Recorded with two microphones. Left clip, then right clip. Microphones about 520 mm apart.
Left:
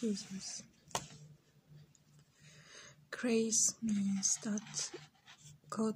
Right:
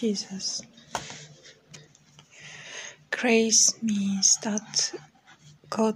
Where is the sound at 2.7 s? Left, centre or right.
Right.